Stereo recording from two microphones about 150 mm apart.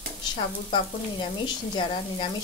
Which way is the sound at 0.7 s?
30° left (ahead or behind).